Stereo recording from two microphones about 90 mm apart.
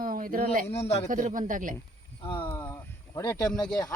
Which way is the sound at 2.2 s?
85° left.